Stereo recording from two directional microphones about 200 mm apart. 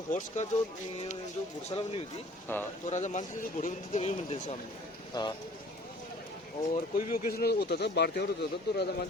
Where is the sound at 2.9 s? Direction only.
35° left (ahead or behind).